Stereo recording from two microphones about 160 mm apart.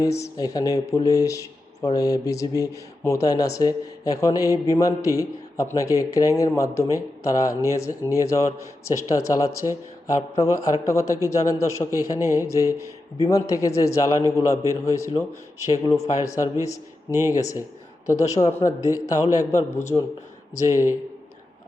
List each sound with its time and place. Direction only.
0.0 s speech: 20° left (ahead or behind)